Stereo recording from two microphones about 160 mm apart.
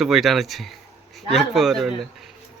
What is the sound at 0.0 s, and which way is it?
Speech, centre (ahead or behind).